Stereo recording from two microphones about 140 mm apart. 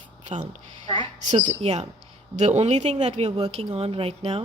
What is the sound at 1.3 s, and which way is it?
A woman's voice, 55° right (ahead or behind).